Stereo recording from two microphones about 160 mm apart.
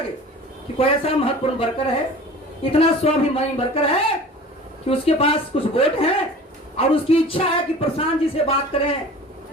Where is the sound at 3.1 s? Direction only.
40° left (ahead or behind).